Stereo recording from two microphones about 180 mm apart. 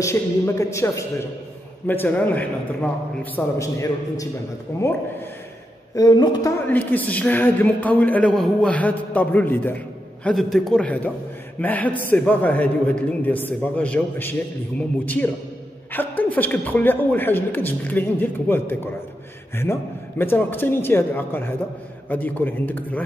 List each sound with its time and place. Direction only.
0.0 s a man's voice: 15° left (ahead or behind)
6.7 s a man's voice: 10° left (ahead or behind)
15.9 s a man's voice: 10° left (ahead or behind)